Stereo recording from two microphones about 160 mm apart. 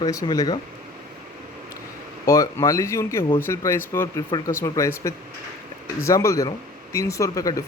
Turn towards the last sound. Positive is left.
turn(degrees=20)  # may be behind; listen again after turning